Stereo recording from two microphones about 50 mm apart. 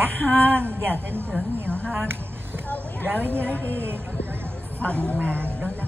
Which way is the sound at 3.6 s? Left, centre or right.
Right.